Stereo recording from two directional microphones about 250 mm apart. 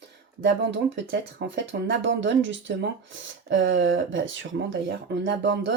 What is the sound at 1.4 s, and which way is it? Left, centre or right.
Speech, right.